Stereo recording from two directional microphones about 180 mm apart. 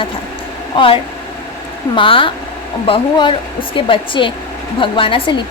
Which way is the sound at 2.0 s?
30° left (ahead or behind).